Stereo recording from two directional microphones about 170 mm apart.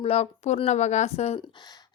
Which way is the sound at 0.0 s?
35° left (ahead or behind).